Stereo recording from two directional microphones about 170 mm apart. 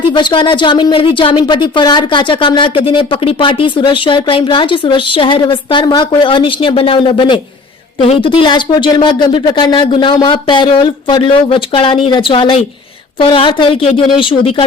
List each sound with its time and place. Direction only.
0.2 s a woman's voice: 30° left (ahead or behind)